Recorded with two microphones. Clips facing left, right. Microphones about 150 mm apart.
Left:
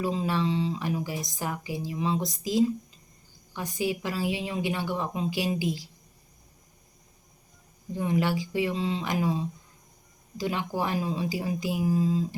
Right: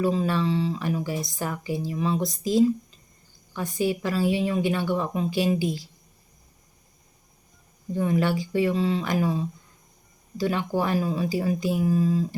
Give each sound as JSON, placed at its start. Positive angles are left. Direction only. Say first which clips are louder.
{"t": 0.0, "sound": "speech", "louder": "right 4 dB", "side_deg": 15}
{"t": 3.5, "sound": "speech", "louder": "right 4 dB", "side_deg": 20}
{"t": 7.9, "sound": "speech", "louder": "right 3 dB", "side_deg": 15}